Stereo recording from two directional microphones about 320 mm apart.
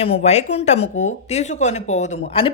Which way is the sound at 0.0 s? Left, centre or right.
Centre.